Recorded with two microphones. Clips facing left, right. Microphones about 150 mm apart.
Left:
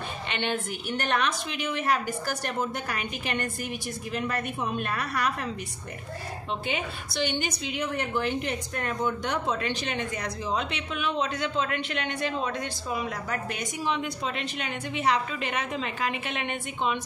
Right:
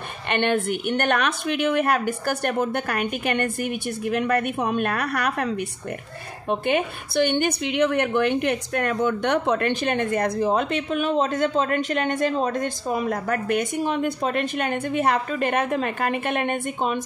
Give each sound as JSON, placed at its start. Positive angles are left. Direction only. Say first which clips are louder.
{"t": 0.3, "sound": "a woman's voice", "louder": "right 9 dB", "side_deg": -55}
{"t": 6.5, "sound": "a woman's voice", "louder": "right 9 dB", "side_deg": -55}